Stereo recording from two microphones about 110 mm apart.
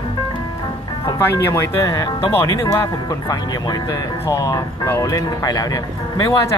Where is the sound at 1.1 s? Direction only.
25° left (ahead or behind).